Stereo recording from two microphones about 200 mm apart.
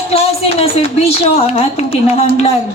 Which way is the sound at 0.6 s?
30° left (ahead or behind).